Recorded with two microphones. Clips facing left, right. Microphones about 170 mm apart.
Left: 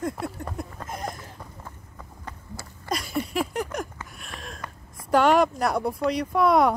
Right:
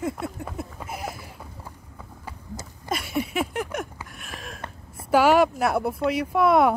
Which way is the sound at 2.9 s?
5° right (ahead or behind).